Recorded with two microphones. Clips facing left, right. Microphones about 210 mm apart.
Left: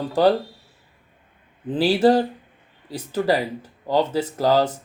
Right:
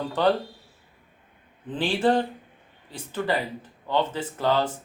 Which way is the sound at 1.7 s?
35° left (ahead or behind).